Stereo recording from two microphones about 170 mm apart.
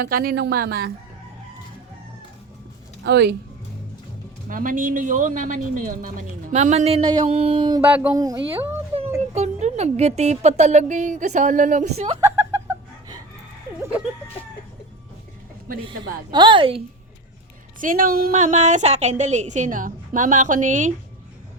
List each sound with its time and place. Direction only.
0.0 s speech: 60° right (ahead or behind)
3.0 s speech: 80° right
4.4 s speech: 50° right (ahead or behind); by 7.8 s 30° right (ahead or behind)
7.8 s a sound: 10° right (ahead or behind)
8.1 s a woman's voice: 20° right (ahead or behind)
9.0 s speech: 40° right (ahead or behind)
15.8 s a woman's voice: 25° right (ahead or behind)
17.7 s speech: 55° right (ahead or behind)
18.3 s speech: 40° right (ahead or behind)